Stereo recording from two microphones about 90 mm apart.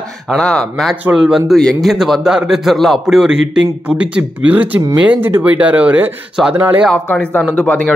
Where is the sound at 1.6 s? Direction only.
10° left (ahead or behind); by 6.8 s 25° right (ahead or behind).